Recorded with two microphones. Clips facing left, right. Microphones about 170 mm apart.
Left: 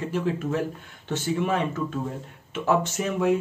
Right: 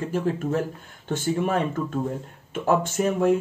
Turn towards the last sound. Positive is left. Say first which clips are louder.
# right 3 dB
turn(degrees=-45)  # may be behind; listen again after turning